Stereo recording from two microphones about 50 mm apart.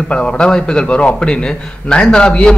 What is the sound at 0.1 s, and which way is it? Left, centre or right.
A man's voice, centre.